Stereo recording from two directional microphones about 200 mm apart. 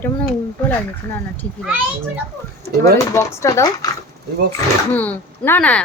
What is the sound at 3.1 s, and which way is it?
Speech, 15° left (ahead or behind).